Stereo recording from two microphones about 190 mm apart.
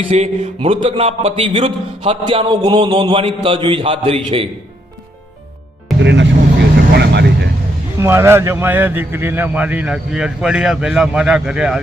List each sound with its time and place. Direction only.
0.0 s speech: 30° right (ahead or behind)
6.0 s speech: 70° right (ahead or behind)
6.9 s vehicle: 60° right (ahead or behind)
7.9 s a man's voice: 15° right (ahead or behind)